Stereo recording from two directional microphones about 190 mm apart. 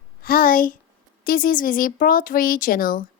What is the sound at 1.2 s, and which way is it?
A woman's voice, 50° left (ahead or behind).